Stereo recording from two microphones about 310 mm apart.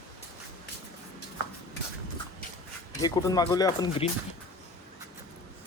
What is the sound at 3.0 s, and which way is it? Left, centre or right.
Speech, centre.